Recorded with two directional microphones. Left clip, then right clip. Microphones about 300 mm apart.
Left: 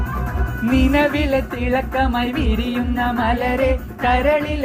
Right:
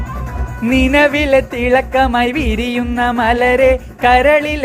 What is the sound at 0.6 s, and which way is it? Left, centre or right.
Music, right.